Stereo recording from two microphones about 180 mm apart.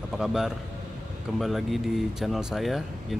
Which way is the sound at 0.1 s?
5° right (ahead or behind).